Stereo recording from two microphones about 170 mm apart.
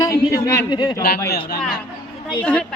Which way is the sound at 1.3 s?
65° left (ahead or behind).